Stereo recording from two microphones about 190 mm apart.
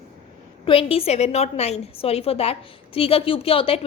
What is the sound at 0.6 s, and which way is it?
A woman's voice, 30° left (ahead or behind).